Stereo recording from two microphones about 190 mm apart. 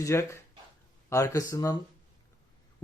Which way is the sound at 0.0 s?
15° left (ahead or behind).